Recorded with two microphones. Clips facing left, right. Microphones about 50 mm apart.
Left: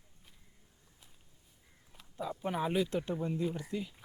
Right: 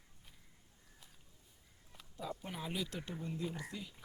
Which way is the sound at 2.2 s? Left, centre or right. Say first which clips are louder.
Left 9 dB; left.